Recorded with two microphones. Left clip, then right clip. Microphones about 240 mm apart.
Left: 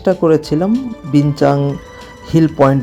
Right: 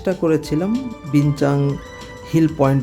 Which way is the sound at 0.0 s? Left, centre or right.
Centre.